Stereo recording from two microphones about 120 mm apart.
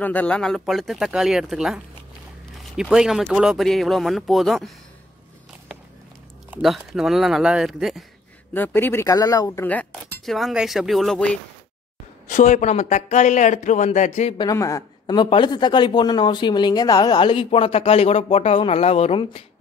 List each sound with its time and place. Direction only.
0.0 s speech: 15° left (ahead or behind)
6.6 s speech: centre (ahead or behind)
8.5 s speech: 15° left (ahead or behind)
9.0 s speech: 30° left (ahead or behind)
9.6 s speech: 15° left (ahead or behind)
10.2 s speech: centre (ahead or behind)
12.3 s speech: 90° left
14.4 s a woman's voice: 25° left (ahead or behind)
15.2 s speech: 40° left (ahead or behind); by 19.4 s 60° left (ahead or behind)